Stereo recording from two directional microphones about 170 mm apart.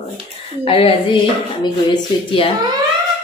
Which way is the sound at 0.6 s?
30° left (ahead or behind).